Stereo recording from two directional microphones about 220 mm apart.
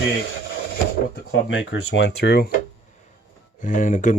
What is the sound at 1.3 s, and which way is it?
Speech, 55° left (ahead or behind).